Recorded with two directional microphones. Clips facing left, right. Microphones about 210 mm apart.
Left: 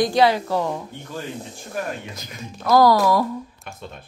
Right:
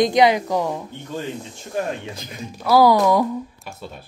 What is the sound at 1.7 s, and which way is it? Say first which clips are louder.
Speech: right 4 dB; 30° right (ahead or behind).